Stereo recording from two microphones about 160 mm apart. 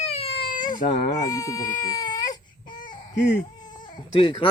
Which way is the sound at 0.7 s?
55° left (ahead or behind).